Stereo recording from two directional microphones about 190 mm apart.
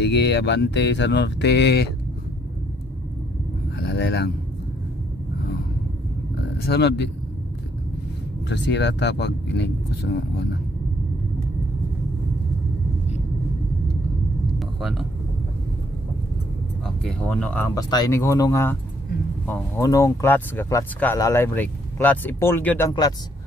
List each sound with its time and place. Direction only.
0.0 s speech: 65° left (ahead or behind)
3.8 s a sound: 60° left (ahead or behind)
6.6 s speech: 60° left (ahead or behind)
8.5 s speech: 65° left (ahead or behind)
14.8 s speech: centre (ahead or behind)
16.8 s speech: 5° left (ahead or behind)